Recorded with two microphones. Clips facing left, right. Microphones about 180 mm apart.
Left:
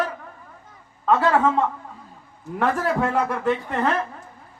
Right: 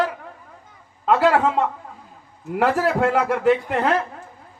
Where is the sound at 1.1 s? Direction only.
75° right (ahead or behind).